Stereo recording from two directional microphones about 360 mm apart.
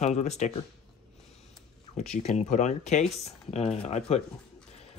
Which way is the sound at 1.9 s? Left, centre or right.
Centre.